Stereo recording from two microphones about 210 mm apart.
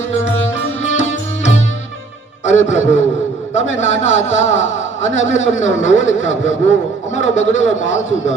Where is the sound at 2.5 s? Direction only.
35° left (ahead or behind).